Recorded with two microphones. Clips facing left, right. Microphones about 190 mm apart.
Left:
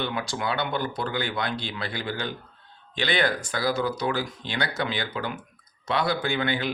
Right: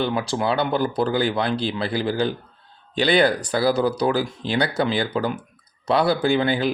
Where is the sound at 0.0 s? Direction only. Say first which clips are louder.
Right 6 dB; 30° right (ahead or behind).